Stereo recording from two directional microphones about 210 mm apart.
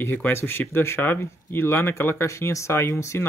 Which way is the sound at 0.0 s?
10° left (ahead or behind).